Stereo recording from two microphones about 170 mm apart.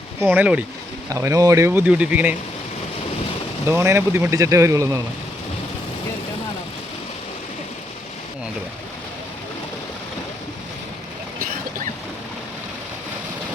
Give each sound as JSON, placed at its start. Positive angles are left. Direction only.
{"t": 0.2, "sound": "speech", "side_deg": -10}
{"t": 1.1, "sound": "speech", "side_deg": -20}
{"t": 3.7, "sound": "speech", "side_deg": -15}